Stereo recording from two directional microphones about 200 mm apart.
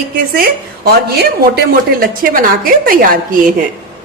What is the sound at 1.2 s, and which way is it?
A woman's voice, 50° right (ahead or behind).